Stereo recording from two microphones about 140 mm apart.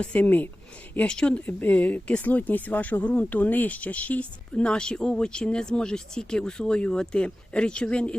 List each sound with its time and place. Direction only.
0.0 s speech: 10° left (ahead or behind)